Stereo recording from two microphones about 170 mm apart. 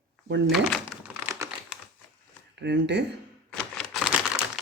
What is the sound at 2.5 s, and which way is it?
Speech, 90° right.